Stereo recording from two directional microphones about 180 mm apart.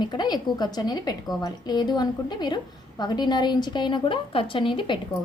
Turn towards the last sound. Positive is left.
turn(degrees=30)  # may be behind; listen again after turning